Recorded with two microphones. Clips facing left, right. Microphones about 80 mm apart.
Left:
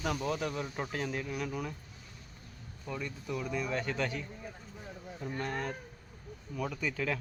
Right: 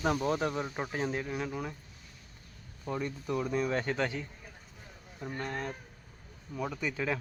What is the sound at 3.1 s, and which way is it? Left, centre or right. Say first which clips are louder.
Speech: right 3 dB; right.